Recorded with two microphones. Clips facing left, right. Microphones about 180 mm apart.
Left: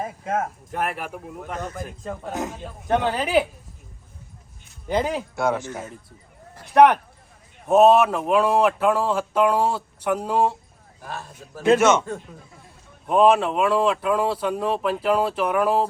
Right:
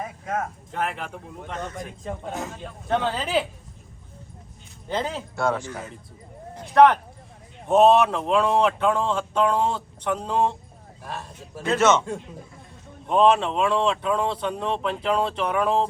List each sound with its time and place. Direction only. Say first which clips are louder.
0.0 s a sound: left 3 dB; 45° left (ahead or behind)
0.7 s speech: even; 10° left (ahead or behind)
2.8 s speech: left 3 dB; 15° left (ahead or behind)
4.9 s speech: left 4 dB; 15° left (ahead or behind)
5.7 s speech: left 2 dB; 5° left (ahead or behind)
6.7 s speech: left 1 dB; 15° left (ahead or behind)
7.7 s speech: left 2 dB; 5° left (ahead or behind)
11.8 s speech: left 1 dB; 15° left (ahead or behind)
13.1 s speech: left 2 dB; 5° left (ahead or behind)